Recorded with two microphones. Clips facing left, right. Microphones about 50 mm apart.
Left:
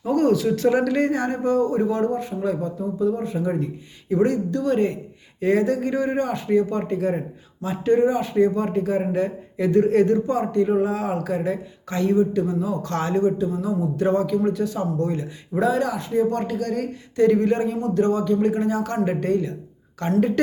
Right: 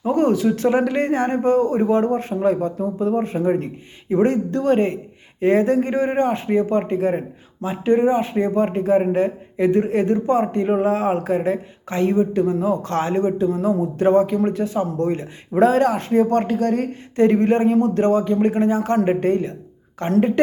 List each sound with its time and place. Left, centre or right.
0.1 s a man's voice: right
10.2 s a man's voice: right
13.5 s a man's voice: right
14.9 s a man's voice: right